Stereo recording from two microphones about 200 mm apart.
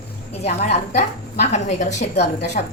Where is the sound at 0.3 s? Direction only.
30° left (ahead or behind).